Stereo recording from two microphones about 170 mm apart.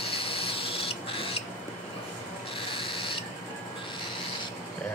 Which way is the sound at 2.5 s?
30° left (ahead or behind).